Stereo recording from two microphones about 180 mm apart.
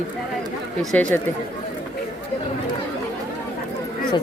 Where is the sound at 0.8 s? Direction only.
5° left (ahead or behind).